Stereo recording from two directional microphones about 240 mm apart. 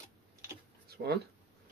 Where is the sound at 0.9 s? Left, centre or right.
Right.